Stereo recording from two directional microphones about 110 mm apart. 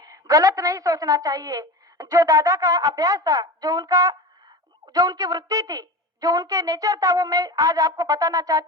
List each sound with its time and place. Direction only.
0.0 s a woman's voice: 30° right (ahead or behind)